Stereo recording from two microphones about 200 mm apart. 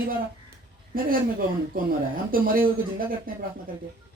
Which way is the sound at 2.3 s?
45° right (ahead or behind).